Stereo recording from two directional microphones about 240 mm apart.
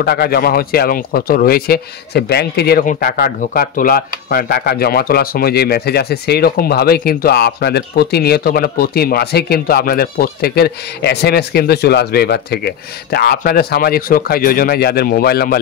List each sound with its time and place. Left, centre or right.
0.0 s speech: left